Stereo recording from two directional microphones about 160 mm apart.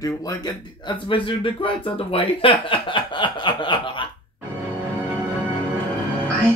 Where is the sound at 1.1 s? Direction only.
35° left (ahead or behind).